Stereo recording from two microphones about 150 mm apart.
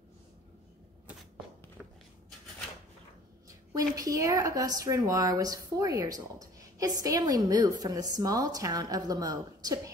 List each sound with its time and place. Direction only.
3.7 s a woman's voice: 20° right (ahead or behind)